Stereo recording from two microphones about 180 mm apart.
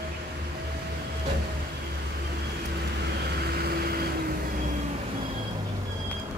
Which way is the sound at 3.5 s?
60° right (ahead or behind).